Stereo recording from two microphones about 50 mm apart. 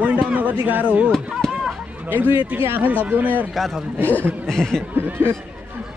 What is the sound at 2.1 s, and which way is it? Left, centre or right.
Speech, right.